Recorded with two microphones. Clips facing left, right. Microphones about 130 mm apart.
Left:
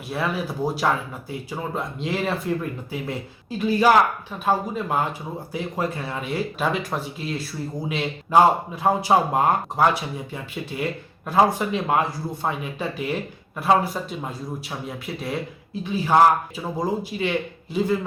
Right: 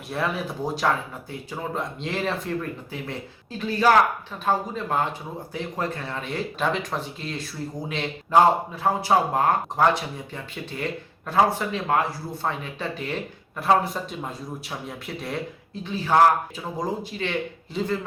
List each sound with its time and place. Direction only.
0.1 s speech: centre (ahead or behind)